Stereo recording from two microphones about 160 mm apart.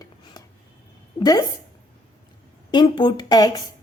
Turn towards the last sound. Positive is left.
turn(degrees=25)  # may be behind; listen again after turning